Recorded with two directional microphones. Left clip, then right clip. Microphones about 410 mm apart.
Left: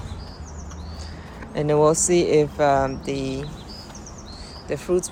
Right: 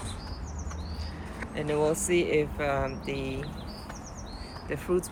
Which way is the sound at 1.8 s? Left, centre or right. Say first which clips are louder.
Left 9 dB; left.